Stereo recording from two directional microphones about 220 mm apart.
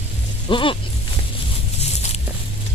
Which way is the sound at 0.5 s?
20° left (ahead or behind).